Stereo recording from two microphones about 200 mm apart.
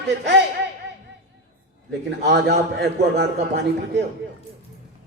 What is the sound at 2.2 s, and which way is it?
Speech, 55° right (ahead or behind).